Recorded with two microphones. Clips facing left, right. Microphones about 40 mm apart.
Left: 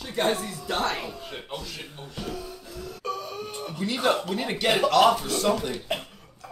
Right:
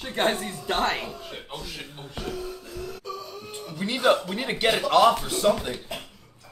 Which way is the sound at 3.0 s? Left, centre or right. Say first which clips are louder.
Left 4 dB; left.